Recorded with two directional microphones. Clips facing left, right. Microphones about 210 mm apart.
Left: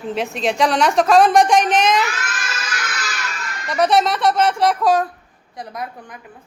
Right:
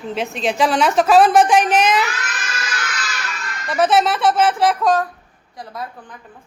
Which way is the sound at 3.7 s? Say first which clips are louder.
Even; centre (ahead or behind).